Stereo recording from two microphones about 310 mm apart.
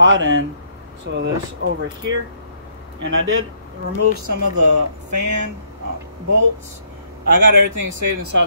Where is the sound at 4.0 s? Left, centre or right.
Right.